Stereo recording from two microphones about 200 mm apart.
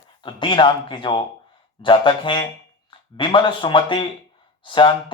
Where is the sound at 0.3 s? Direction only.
25° left (ahead or behind).